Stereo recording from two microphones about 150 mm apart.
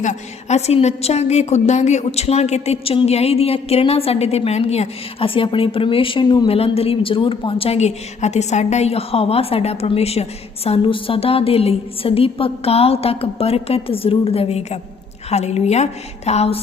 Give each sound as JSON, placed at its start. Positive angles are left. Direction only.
{"t": 0.0, "sound": "a woman's voice", "side_deg": 50}